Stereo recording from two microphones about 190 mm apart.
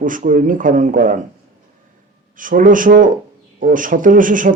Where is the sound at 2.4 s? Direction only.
45° right (ahead or behind).